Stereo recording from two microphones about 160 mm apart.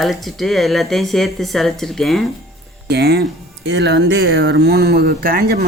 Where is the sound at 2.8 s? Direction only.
90° right; by 5.6 s 75° right (ahead or behind).